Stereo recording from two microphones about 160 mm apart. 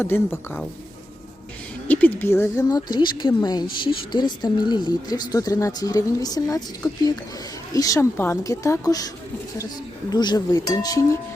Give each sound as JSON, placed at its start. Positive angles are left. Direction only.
{"t": 0.0, "sound": "speech", "side_deg": 15}
{"t": 1.9, "sound": "speech", "side_deg": 10}
{"t": 10.1, "sound": "speech", "side_deg": 25}